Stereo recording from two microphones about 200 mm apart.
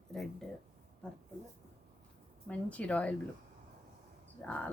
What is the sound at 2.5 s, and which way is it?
Speech, 5° left (ahead or behind).